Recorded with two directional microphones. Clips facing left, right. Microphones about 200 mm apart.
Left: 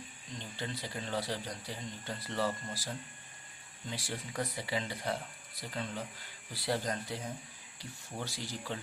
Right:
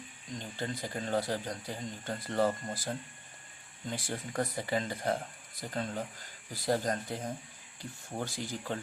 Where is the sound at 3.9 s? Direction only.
50° right (ahead or behind).